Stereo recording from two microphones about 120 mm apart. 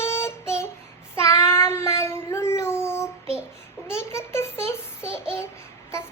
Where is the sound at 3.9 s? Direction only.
20° left (ahead or behind).